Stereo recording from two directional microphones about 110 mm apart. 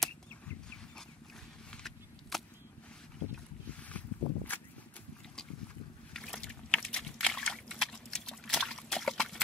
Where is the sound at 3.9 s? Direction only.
15° left (ahead or behind).